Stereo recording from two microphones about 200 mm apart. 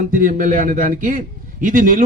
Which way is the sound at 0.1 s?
40° right (ahead or behind).